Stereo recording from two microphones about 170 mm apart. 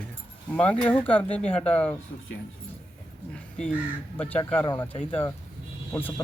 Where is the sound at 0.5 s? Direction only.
5° left (ahead or behind).